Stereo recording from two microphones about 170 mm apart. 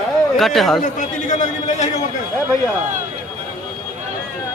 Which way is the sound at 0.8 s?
45° left (ahead or behind).